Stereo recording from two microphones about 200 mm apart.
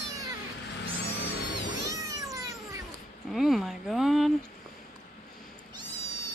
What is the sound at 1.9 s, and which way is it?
Cat, 15° right (ahead or behind).